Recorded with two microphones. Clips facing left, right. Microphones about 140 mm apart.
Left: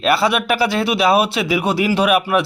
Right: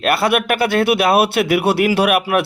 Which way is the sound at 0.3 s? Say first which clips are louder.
Right 1 dB; 55° right (ahead or behind).